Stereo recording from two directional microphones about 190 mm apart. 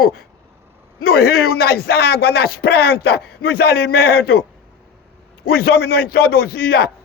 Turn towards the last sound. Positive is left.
turn(degrees=50)  # may be behind; listen again after turning